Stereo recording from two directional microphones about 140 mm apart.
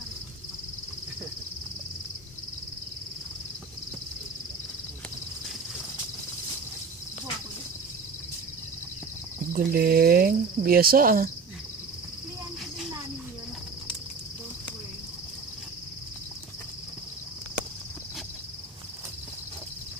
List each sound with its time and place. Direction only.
9.5 s speech: 90° right